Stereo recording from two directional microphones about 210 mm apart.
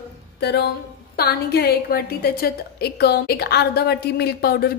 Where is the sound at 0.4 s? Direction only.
50° left (ahead or behind).